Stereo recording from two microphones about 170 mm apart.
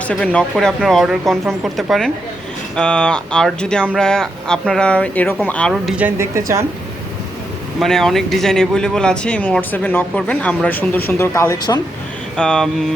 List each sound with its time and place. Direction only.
0.1 s speech: 5° left (ahead or behind)
5.7 s speech: 5° right (ahead or behind)
7.8 s speech: centre (ahead or behind); by 11.8 s 20° left (ahead or behind)
12.4 s speech: 5° left (ahead or behind)